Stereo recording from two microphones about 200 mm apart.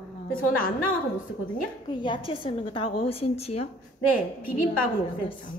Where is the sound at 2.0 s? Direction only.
25° left (ahead or behind).